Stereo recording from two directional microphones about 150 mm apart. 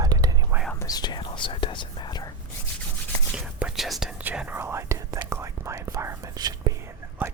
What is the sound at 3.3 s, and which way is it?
Whispering, 5° right (ahead or behind).